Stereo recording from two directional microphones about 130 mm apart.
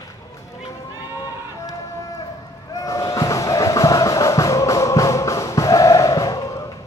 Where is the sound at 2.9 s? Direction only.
25° left (ahead or behind).